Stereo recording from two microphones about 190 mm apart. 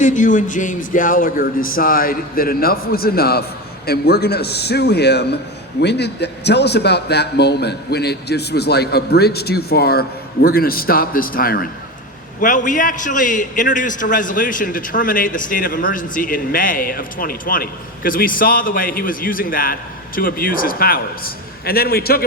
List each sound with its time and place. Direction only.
0.0 s a man's voice: 40° left (ahead or behind)